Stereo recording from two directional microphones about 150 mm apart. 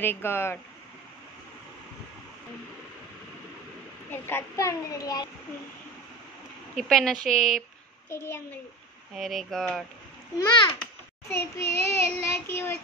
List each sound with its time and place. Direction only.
0.0 s child singing: 15° left (ahead or behind)
4.1 s a child's voice: 15° left (ahead or behind)
6.7 s speech: centre (ahead or behind)
8.1 s child singing: 15° left (ahead or behind)
9.1 s speech: centre (ahead or behind)
10.3 s a child's voice: 30° left (ahead or behind)
10.8 s child singing: 15° left (ahead or behind)